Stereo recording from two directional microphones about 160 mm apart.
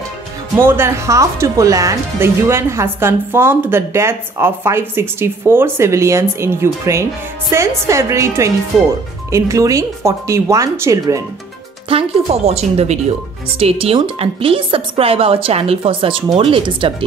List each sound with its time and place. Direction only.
0.6 s speech: 15° right (ahead or behind)
8.7 s speech: centre (ahead or behind)
9.3 s speech: 20° right (ahead or behind)
11.9 s speech: 40° right (ahead or behind)